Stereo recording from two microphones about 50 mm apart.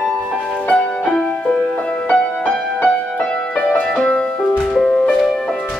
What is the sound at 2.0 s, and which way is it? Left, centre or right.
Music, left.